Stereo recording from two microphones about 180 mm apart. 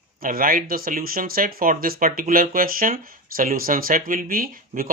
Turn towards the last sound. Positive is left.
turn(degrees=-50)  # may be behind; listen again after turning